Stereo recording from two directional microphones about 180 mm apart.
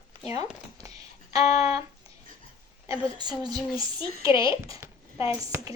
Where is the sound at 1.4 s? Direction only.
35° left (ahead or behind).